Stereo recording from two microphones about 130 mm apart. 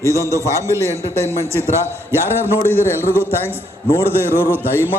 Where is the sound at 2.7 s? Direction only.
15° left (ahead or behind).